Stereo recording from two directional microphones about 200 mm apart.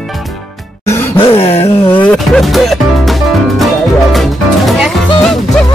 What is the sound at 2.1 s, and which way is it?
Music, centre (ahead or behind).